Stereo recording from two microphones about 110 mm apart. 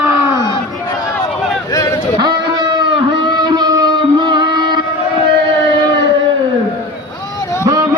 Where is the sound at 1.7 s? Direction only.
30° left (ahead or behind).